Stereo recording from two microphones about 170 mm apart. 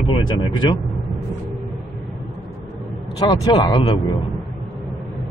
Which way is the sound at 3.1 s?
25° left (ahead or behind).